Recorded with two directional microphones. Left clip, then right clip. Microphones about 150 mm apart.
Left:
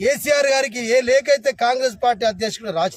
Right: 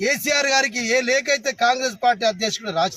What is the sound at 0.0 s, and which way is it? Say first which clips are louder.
Speech: left 3 dB; 40° left (ahead or behind).